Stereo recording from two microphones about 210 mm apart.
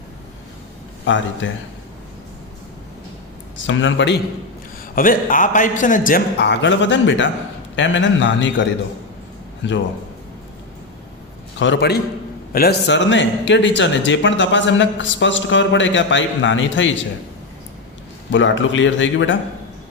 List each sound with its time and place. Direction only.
1.0 s a man's voice: 60° left (ahead or behind)
3.7 s a man's voice: 65° left (ahead or behind)
4.9 s a man's voice: 40° left (ahead or behind); by 8.6 s 60° left (ahead or behind)
9.6 s a man's voice: 60° left (ahead or behind)
11.6 s a man's voice: 55° left (ahead or behind)
18.3 s a man's voice: 60° left (ahead or behind)